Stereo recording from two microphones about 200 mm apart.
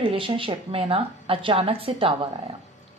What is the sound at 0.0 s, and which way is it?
A woman's voice, 25° right (ahead or behind).